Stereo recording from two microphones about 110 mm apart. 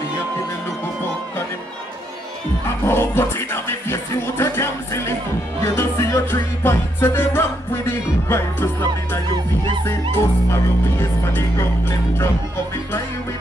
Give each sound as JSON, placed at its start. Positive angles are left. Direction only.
{"t": 2.9, "sound": "speech", "side_deg": 20}
{"t": 10.1, "sound": "speech", "side_deg": 20}